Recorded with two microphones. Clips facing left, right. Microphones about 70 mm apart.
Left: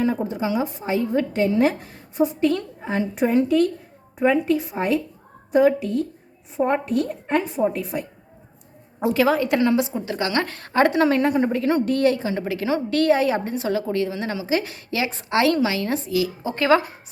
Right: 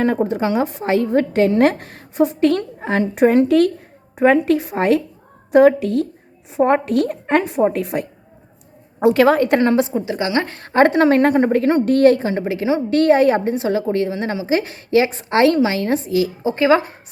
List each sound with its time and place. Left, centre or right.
0.0 s a woman's voice: right
9.9 s a woman's voice: right
12.4 s a woman's voice: right
16.4 s speech: centre